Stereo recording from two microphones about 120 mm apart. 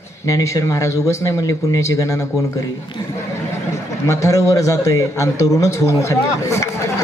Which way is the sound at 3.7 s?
25° left (ahead or behind).